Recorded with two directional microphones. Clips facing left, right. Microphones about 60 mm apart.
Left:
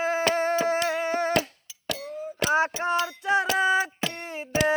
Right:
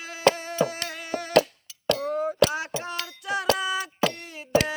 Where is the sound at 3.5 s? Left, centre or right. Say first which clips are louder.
Left 4 dB; left.